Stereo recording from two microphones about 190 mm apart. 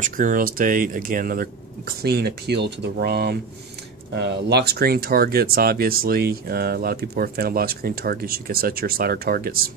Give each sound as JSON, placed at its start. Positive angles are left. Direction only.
{"t": 0.0, "sound": "speech", "side_deg": -45}